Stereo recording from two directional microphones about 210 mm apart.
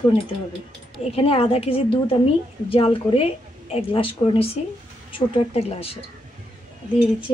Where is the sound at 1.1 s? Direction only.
25° left (ahead or behind).